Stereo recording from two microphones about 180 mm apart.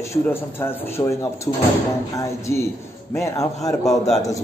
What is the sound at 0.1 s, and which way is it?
Speech, 15° left (ahead or behind).